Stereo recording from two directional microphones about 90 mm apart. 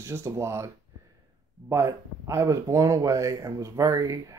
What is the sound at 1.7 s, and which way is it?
Speech, 35° right (ahead or behind).